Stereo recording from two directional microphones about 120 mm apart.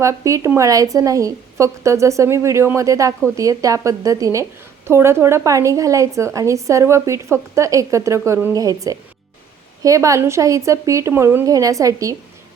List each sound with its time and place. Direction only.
0.0 s a woman's voice: 25° right (ahead or behind)